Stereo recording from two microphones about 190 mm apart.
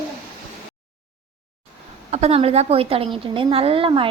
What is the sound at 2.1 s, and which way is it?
A woman's voice, 35° right (ahead or behind).